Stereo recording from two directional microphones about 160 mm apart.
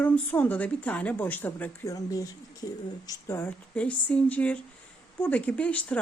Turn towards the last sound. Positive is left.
turn(degrees=10)  # may be behind; listen again after turning